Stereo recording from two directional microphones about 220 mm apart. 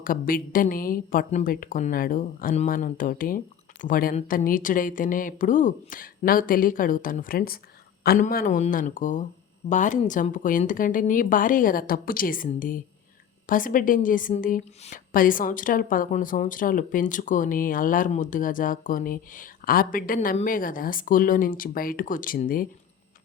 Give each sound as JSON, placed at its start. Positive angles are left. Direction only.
{"t": 0.0, "sound": "speech", "side_deg": 40}